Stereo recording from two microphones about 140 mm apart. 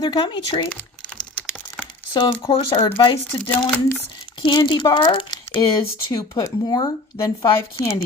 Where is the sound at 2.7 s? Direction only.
30° left (ahead or behind).